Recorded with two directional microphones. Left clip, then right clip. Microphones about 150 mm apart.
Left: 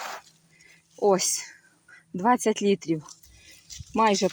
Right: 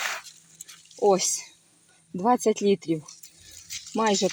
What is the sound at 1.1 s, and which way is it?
Speech, centre (ahead or behind).